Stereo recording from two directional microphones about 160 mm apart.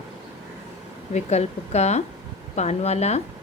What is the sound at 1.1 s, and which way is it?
A woman's voice, 45° left (ahead or behind).